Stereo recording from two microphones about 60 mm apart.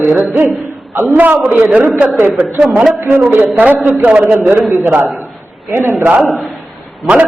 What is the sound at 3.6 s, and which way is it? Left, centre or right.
A man's voice, right.